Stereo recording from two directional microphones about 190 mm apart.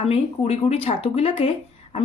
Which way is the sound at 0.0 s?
30° left (ahead or behind).